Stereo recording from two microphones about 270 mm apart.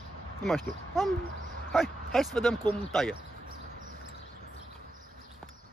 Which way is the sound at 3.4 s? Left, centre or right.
Right.